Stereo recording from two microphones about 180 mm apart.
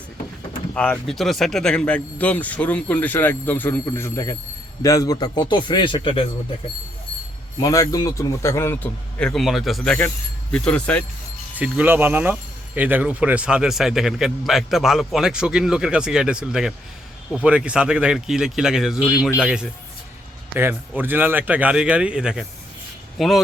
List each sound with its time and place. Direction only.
0.7 s a man's voice: 5° left (ahead or behind); by 6.2 s 25° left (ahead or behind)
7.6 s speech: 20° left (ahead or behind)
11.5 s speech: 10° right (ahead or behind)